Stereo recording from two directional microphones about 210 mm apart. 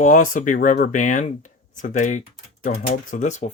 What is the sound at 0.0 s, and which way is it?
Speech, 40° left (ahead or behind).